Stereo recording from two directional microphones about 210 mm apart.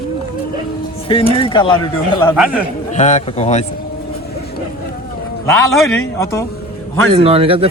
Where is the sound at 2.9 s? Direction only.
35° left (ahead or behind).